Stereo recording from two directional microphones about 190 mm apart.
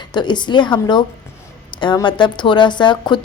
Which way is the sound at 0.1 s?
25° left (ahead or behind).